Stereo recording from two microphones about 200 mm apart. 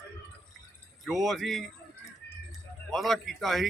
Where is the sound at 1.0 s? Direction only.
Centre (ahead or behind).